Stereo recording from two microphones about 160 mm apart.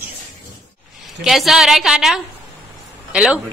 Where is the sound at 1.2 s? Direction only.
Centre (ahead or behind).